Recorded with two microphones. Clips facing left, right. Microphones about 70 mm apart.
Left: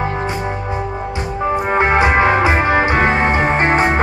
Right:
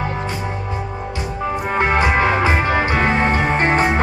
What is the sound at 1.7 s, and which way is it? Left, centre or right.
Music, centre.